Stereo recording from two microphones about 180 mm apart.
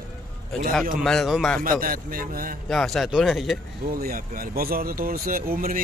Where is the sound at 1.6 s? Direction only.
50° right (ahead or behind).